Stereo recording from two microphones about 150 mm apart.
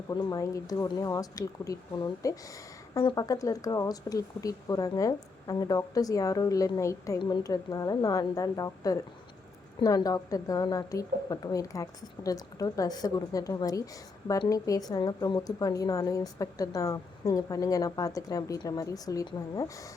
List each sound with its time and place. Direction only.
0.1 s a woman's voice: 25° left (ahead or behind)